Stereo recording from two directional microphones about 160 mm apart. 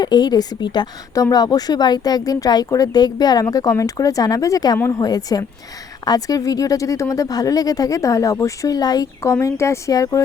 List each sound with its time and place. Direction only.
0.0 s speech: 25° left (ahead or behind)